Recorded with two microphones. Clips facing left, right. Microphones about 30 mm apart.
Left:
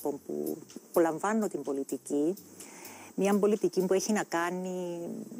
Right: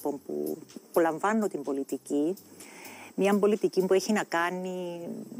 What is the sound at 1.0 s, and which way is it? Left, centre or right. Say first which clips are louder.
Speech: right 2 dB; right.